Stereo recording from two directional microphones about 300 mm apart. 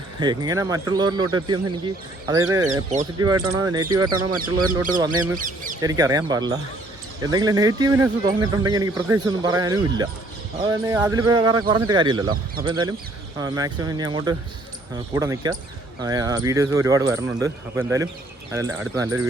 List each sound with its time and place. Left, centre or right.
0.2 s speech: centre
2.6 s speech: right
3.2 s speech: centre
5.4 s speech: right
5.8 s speech: centre